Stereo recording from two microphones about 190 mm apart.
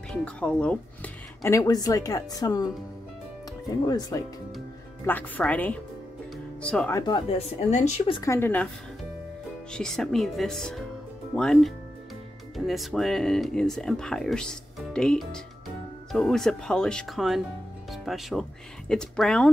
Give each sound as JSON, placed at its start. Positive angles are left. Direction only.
{"t": 0.1, "sound": "speech", "side_deg": 5}
{"t": 3.8, "sound": "speech", "side_deg": 20}
{"t": 5.0, "sound": "speech", "side_deg": 10}
{"t": 6.3, "sound": "music", "side_deg": 5}
{"t": 7.0, "sound": "speech", "side_deg": 25}
{"t": 8.2, "sound": "speech", "side_deg": 15}
{"t": 9.7, "sound": "speech", "side_deg": 5}